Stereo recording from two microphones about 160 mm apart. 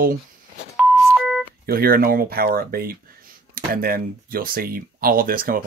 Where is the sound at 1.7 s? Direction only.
65° right (ahead or behind).